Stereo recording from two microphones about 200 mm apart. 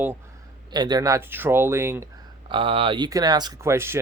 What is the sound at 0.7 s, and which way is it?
Speech, 20° right (ahead or behind).